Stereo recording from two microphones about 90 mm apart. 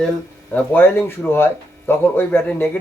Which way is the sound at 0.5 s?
20° left (ahead or behind).